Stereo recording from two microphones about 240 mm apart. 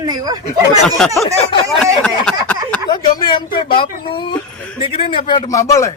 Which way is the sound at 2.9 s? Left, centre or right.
Centre.